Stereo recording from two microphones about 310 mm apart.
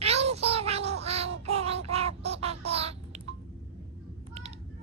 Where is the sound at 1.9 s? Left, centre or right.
Centre.